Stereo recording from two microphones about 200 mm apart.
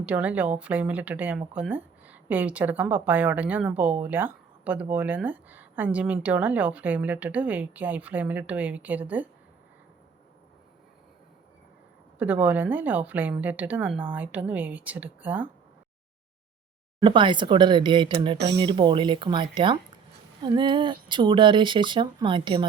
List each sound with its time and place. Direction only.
0.0 s speech: 5° right (ahead or behind)
12.2 s speech: 10° right (ahead or behind)
17.0 s speech: 25° right (ahead or behind)